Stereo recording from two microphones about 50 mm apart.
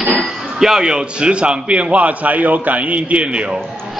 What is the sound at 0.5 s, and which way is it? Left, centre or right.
A man's voice, centre.